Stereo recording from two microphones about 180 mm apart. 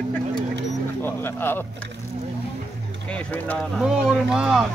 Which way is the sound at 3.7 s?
5° right (ahead or behind).